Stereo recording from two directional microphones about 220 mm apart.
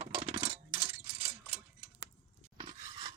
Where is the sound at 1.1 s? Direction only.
25° right (ahead or behind).